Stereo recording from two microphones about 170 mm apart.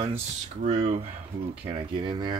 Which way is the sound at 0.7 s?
40° right (ahead or behind).